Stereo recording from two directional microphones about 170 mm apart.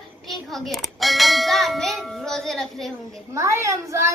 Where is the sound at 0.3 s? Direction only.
Centre (ahead or behind).